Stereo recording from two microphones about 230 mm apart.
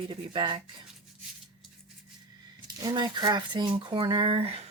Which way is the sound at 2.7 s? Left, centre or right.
Centre.